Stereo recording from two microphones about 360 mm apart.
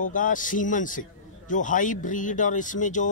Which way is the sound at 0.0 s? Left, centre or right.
Left.